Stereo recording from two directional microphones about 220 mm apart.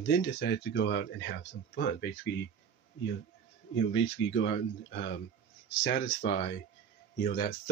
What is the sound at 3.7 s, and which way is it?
Speech, 60° left (ahead or behind).